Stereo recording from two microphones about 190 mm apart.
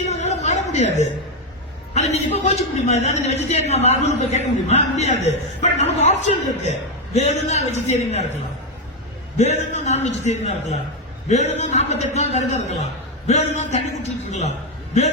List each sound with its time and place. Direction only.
0.0 s a sound: 35° left (ahead or behind)
1.9 s a man's voice: 35° left (ahead or behind)
9.4 s a man's voice: 35° left (ahead or behind)